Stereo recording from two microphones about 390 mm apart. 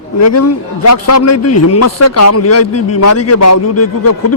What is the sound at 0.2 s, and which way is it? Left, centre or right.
A man's voice, left.